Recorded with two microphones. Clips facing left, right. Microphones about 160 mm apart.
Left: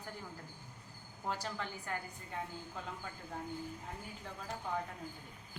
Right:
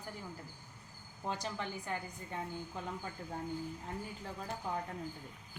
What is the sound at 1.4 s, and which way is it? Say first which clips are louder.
Speech: right 2 dB; 20° right (ahead or behind).